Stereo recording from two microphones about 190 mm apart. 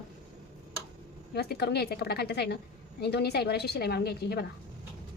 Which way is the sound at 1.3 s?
55° left (ahead or behind).